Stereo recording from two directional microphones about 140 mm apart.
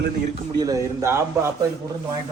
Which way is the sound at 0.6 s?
25° right (ahead or behind).